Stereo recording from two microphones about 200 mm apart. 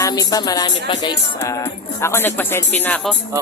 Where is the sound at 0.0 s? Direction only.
20° left (ahead or behind).